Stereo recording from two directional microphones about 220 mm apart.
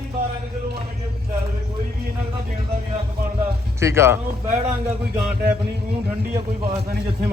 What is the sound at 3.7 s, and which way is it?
Speech, 10° right (ahead or behind).